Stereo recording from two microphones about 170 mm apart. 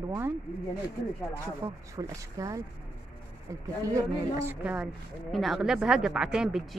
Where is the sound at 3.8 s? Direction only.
20° right (ahead or behind).